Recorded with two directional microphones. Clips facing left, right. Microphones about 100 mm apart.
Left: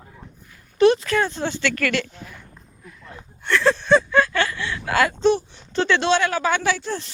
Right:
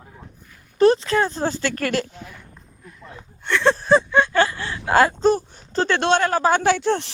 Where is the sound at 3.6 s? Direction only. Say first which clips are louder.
Right 1 dB; 35° right (ahead or behind).